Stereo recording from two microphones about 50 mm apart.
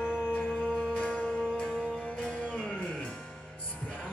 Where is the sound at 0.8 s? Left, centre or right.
Left.